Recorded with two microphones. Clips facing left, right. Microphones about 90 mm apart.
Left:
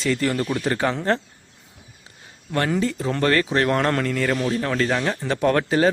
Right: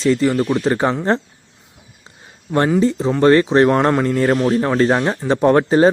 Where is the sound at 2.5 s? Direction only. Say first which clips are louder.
Right 7 dB; 20° right (ahead or behind).